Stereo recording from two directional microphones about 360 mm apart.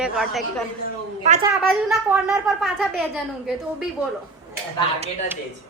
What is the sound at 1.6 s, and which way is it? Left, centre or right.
Speech, centre.